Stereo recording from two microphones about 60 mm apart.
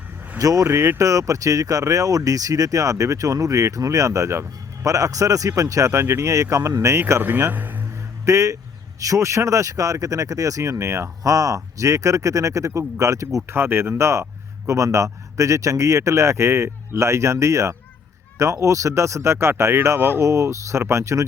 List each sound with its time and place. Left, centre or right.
0.3 s speech: right
5.9 s speech: right
7.2 s speech: right
8.2 s speech: right
11.2 s speech: right
13.5 s speech: right